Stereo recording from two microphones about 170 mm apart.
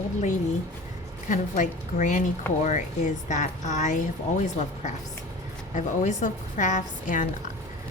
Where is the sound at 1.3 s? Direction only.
45° left (ahead or behind).